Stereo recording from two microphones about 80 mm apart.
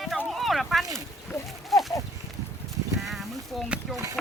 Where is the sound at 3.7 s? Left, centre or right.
Centre.